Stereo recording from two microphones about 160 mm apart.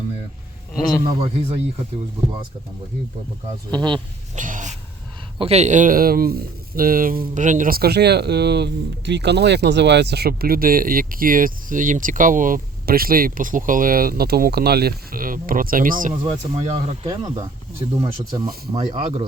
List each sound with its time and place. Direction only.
1.0 s speech: 35° right (ahead or behind)
3.7 s speech: 30° right (ahead or behind)
4.4 s a sound: 55° right (ahead or behind)
5.4 s speech: 40° right (ahead or behind); by 7.2 s 65° right (ahead or behind)
7.3 s speech: 50° right (ahead or behind)
16.6 s speech: 45° right (ahead or behind)
17.1 s speech: 20° right (ahead or behind)